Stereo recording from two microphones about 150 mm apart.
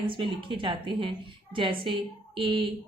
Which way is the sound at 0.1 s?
35° right (ahead or behind).